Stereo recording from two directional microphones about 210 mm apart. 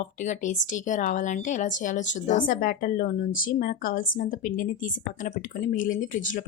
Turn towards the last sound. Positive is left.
turn(degrees=40)  # may be behind; listen again after turning